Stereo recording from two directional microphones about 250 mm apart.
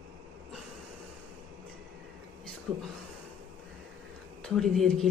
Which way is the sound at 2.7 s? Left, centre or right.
Centre.